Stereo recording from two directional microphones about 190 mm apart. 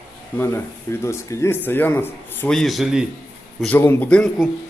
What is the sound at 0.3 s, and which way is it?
Speech, 10° left (ahead or behind).